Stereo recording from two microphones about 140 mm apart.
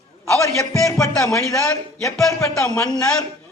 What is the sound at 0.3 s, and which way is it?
A man's voice, 20° left (ahead or behind).